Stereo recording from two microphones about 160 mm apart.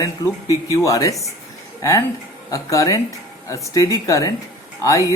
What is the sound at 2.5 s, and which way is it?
Speech, 20° left (ahead or behind).